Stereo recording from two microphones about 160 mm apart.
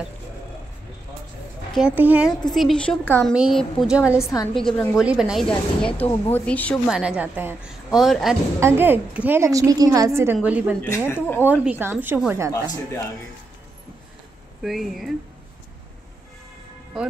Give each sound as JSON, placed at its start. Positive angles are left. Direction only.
{"t": 1.7, "sound": "a woman's voice", "side_deg": -5}
{"t": 2.5, "sound": "a woman's voice", "side_deg": 0}
{"t": 4.2, "sound": "a woman's voice", "side_deg": 20}
{"t": 4.6, "sound": "a woman's voice", "side_deg": 5}
{"t": 6.9, "sound": "a woman's voice", "side_deg": -5}
{"t": 8.5, "sound": "a woman's voice", "side_deg": -15}
{"t": 11.1, "sound": "speech", "side_deg": 15}
{"t": 11.4, "sound": "a woman's voice", "side_deg": -10}
{"t": 14.6, "sound": "a woman's voice", "side_deg": 0}